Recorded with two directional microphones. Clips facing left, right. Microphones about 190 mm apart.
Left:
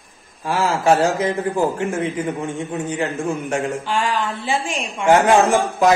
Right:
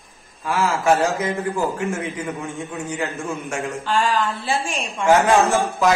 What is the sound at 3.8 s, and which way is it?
A woman's voice, 15° left (ahead or behind).